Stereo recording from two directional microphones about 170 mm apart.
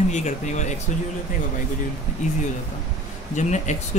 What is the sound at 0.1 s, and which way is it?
Speech, 45° left (ahead or behind).